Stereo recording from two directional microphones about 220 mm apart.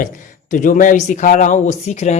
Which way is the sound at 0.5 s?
35° left (ahead or behind).